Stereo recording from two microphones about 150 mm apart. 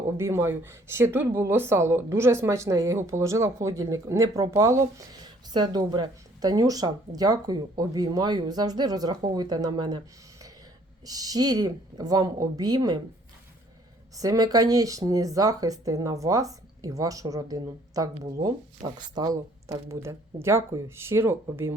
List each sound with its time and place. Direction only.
0.2 s speech: 15° right (ahead or behind)
11.0 s speech: 25° right (ahead or behind)
14.2 s speech: 25° right (ahead or behind)